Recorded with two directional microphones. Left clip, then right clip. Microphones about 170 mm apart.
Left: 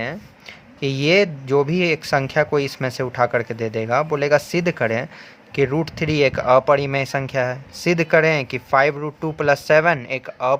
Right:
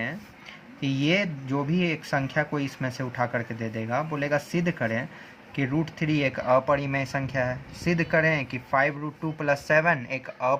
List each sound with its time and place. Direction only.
0.8 s speech: 60° left (ahead or behind); by 10.6 s 40° left (ahead or behind)